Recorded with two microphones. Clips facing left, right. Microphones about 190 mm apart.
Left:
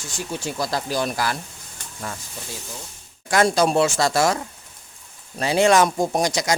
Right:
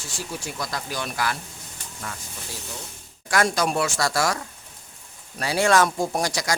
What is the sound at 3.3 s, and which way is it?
Speech, 25° left (ahead or behind).